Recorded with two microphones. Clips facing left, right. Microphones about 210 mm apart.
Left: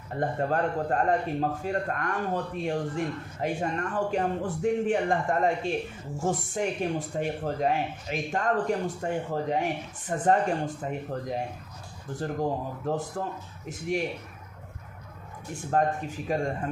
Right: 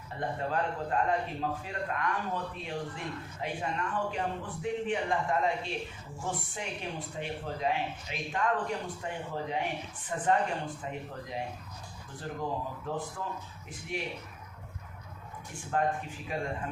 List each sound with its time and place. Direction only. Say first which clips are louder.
0.1 s speech: left 6 dB; 45° left (ahead or behind)
15.7 s speech: left 4 dB; 40° left (ahead or behind)